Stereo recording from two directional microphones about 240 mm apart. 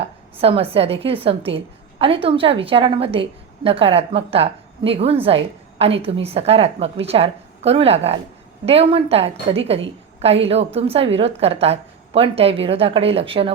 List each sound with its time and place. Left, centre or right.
0.3 s a woman's voice: right